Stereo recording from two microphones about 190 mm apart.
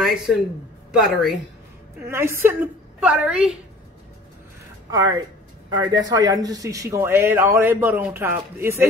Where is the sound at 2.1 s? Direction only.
15° right (ahead or behind).